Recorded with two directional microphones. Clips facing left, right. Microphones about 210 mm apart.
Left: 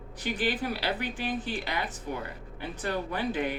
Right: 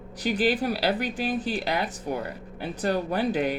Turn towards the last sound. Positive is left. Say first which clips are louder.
# right 5 dB
turn(degrees=-40)  # may be behind; listen again after turning